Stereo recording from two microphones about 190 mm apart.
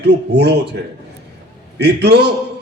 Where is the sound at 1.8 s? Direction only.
60° right (ahead or behind).